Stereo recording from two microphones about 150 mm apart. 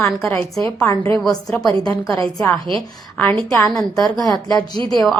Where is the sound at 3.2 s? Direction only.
10° left (ahead or behind).